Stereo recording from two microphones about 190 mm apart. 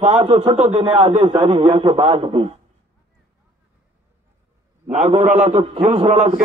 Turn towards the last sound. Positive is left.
turn(degrees=-30)  # may be behind; listen again after turning